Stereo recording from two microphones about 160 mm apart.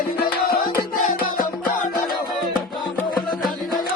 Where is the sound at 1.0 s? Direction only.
55° left (ahead or behind).